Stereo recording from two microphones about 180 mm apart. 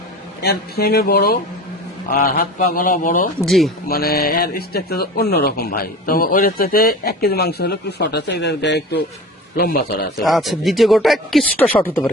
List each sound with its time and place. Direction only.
0.4 s a man's voice: 60° left (ahead or behind); by 3.2 s 45° left (ahead or behind)
3.4 s speech: centre (ahead or behind)
3.8 s speech: 55° left (ahead or behind); by 9.0 s 75° left (ahead or behind)
9.6 s speech: 60° left (ahead or behind)
10.2 s speech: centre (ahead or behind)